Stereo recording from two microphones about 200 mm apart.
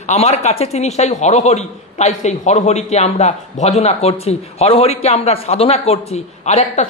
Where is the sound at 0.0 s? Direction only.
35° left (ahead or behind).